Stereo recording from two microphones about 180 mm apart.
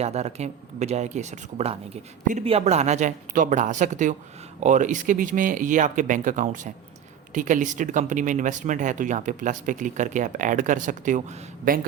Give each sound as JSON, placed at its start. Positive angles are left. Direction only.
{"t": 0.0, "sound": "speech", "side_deg": -35}